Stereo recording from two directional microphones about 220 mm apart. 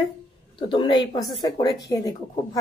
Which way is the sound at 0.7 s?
20° left (ahead or behind).